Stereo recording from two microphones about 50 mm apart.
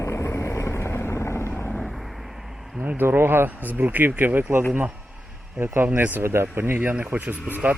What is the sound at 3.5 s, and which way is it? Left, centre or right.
Speech, right.